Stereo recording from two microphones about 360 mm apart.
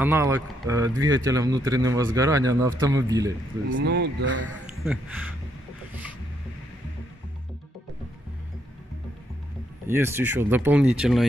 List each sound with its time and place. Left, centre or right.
0.0 s a man's voice: centre
3.7 s speech: right
9.8 s speech: centre